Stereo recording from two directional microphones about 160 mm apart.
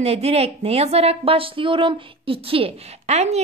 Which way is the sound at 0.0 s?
40° right (ahead or behind).